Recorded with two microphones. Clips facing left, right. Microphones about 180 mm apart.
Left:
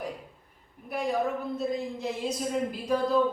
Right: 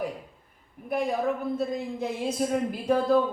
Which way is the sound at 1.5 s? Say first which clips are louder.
Right 1 dB; 55° right (ahead or behind).